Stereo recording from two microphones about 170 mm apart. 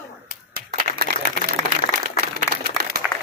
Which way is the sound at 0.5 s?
65° right (ahead or behind).